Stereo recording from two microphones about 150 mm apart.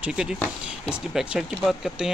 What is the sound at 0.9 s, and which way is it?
Speech, 5° right (ahead or behind).